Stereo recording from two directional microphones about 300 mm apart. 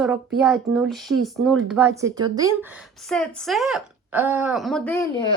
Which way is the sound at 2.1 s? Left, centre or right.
Centre.